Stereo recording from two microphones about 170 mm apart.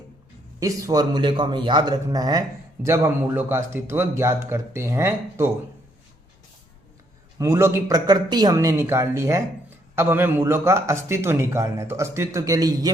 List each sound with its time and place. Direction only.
0.6 s speech: 20° right (ahead or behind)
7.3 s speech: 15° right (ahead or behind)